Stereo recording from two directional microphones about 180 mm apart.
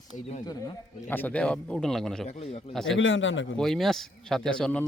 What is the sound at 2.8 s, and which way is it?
Speech, 90° left.